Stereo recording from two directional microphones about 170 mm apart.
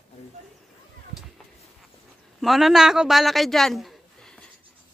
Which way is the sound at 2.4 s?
Centre (ahead or behind).